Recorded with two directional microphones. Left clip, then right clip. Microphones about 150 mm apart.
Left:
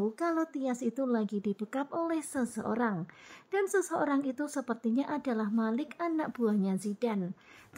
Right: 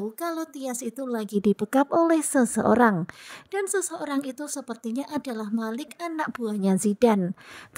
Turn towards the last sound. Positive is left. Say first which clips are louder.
# right 12 dB
turn(degrees=-50)  # may be behind; listen again after turning